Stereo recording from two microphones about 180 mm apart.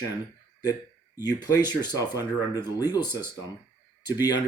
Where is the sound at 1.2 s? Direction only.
20° left (ahead or behind).